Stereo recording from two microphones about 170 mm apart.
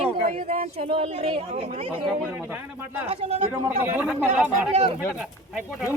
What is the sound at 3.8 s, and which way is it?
Speech, 10° right (ahead or behind).